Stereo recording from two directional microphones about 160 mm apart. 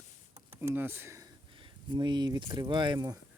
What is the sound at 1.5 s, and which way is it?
Speech, 30° right (ahead or behind).